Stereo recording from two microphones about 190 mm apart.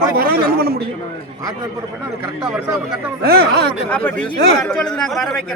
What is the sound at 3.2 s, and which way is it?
Speech, 55° right (ahead or behind).